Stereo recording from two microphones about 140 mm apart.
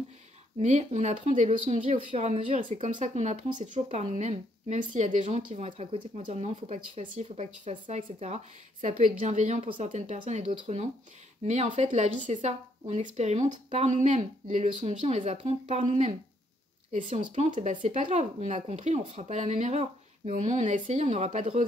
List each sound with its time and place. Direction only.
0.6 s speech: 55° right (ahead or behind)
5.7 s speech: 35° right (ahead or behind)
6.1 s speech: 50° right (ahead or behind)
17.1 s speech: 50° right (ahead or behind)